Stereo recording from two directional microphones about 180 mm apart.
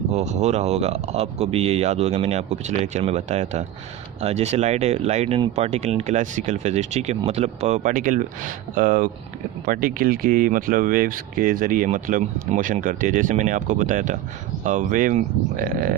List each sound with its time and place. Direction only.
0.1 s speech: 40° right (ahead or behind); by 16.0 s 55° right (ahead or behind)